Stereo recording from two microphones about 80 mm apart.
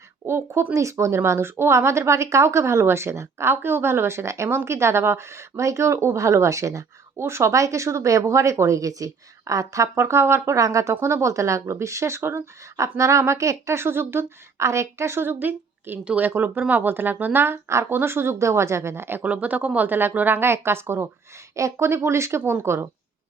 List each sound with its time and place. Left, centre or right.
0.3 s speech: right